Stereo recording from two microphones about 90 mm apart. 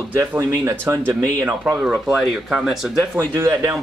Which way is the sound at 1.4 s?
20° right (ahead or behind).